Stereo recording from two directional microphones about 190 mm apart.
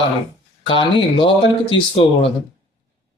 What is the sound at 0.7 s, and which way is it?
Speech, 25° left (ahead or behind).